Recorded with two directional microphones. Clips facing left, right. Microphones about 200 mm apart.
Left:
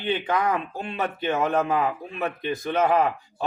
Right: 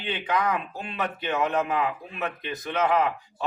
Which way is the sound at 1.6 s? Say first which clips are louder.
Left 3 dB; 30° left (ahead or behind).